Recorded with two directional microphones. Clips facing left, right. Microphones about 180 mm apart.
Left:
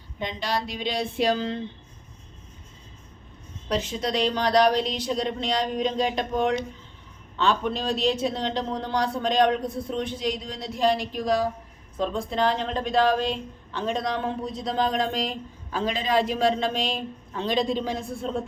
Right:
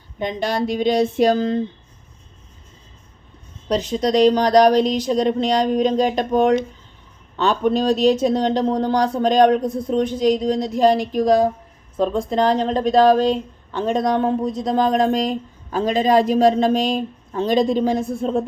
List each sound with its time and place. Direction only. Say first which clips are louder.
0.2 s speech: right 7 dB; 50° right (ahead or behind)
3.7 s speech: right 8 dB; 40° right (ahead or behind)